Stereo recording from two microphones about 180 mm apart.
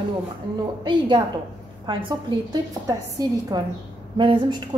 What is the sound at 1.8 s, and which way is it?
A woman's voice, 25° right (ahead or behind).